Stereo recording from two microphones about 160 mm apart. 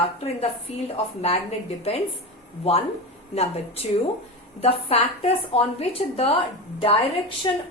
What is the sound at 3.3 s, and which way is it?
Speech, 40° left (ahead or behind).